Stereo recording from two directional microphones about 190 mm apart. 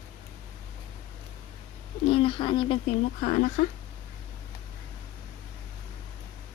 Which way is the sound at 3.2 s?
40° left (ahead or behind).